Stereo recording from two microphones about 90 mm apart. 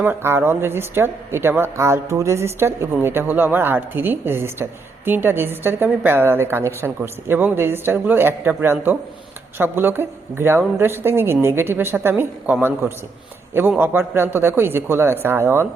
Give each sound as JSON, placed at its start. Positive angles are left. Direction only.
{"t": 0.0, "sound": "a woman's voice", "side_deg": -25}